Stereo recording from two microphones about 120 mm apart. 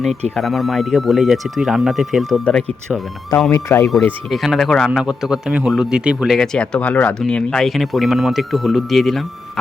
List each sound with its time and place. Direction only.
0.3 s speech: centre (ahead or behind)
3.5 s speech: 20° left (ahead or behind)
4.3 s speech: centre (ahead or behind)